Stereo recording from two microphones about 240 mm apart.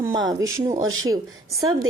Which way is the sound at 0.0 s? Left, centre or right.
Centre.